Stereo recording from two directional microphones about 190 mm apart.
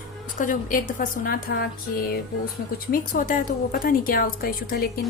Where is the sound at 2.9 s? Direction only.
45° left (ahead or behind).